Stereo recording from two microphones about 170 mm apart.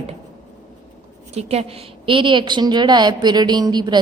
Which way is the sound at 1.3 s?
35° right (ahead or behind).